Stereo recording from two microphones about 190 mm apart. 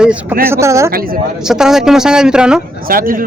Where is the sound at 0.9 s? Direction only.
50° right (ahead or behind).